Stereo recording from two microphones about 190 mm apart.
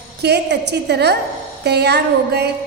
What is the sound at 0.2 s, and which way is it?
A woman's voice, 60° right (ahead or behind).